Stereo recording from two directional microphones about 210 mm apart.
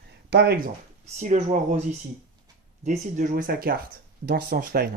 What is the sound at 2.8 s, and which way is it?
Speech, 40° right (ahead or behind).